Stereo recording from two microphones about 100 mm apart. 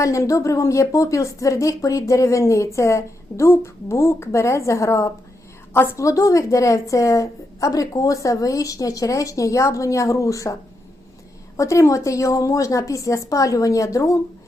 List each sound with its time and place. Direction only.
0.0 s a woman's voice: 30° left (ahead or behind)